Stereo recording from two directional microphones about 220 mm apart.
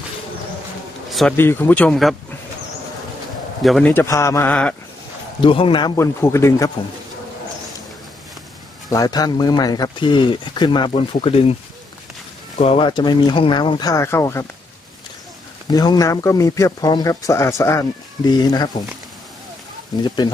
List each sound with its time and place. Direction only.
1.1 s speech: 5° left (ahead or behind)
3.6 s speech: 5° left (ahead or behind)
5.4 s speech: 25° left (ahead or behind)
8.9 s speech: 15° left (ahead or behind)
12.5 s speech: 25° left (ahead or behind)
15.7 s speech: 20° left (ahead or behind)